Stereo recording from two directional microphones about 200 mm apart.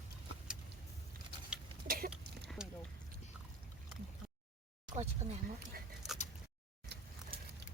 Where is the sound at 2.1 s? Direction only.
5° right (ahead or behind).